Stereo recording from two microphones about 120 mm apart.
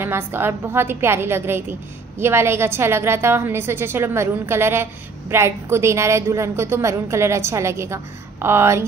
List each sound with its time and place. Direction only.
0.0 s a woman's voice: 20° right (ahead or behind)